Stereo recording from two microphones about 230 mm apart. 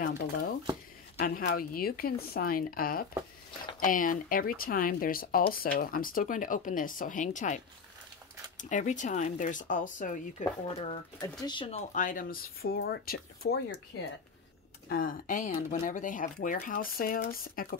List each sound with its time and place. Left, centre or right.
0.0 s speech: left
10.4 s speech: left
11.9 s speech: left
14.9 s speech: left